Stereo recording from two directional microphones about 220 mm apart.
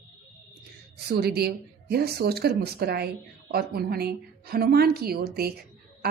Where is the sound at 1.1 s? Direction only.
45° right (ahead or behind).